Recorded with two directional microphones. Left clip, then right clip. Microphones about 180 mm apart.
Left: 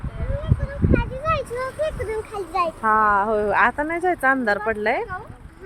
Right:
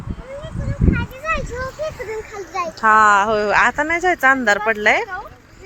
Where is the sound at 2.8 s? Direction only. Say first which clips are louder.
Right 7 dB; 5° right (ahead or behind).